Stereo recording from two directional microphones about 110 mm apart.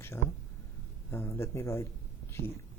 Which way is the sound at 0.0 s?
20° left (ahead or behind).